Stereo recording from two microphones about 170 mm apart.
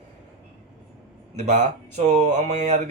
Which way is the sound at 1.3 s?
45° right (ahead or behind).